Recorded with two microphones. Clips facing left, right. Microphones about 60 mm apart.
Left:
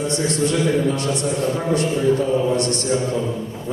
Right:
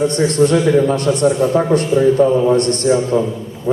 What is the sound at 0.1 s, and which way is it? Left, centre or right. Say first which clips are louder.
A man's voice: right 7 dB; right.